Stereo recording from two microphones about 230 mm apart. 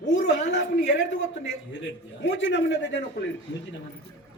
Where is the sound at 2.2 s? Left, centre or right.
Left.